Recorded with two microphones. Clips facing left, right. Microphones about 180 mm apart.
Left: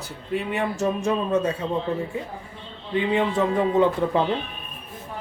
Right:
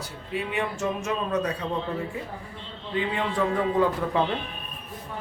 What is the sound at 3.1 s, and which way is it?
A man's voice, 25° left (ahead or behind).